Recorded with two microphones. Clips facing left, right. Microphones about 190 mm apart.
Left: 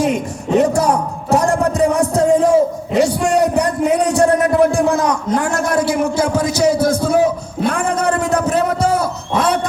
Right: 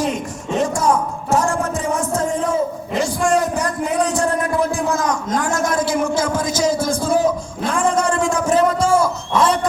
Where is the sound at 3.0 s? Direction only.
65° left (ahead or behind).